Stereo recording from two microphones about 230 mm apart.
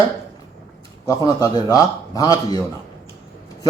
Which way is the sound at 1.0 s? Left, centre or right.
Centre.